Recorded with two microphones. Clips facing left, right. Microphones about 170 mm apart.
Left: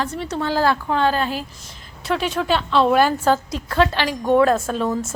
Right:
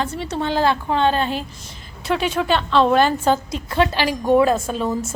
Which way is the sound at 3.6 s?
20° right (ahead or behind).